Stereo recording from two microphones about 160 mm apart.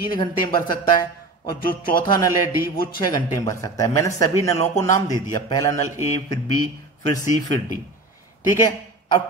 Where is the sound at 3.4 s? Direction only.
20° left (ahead or behind).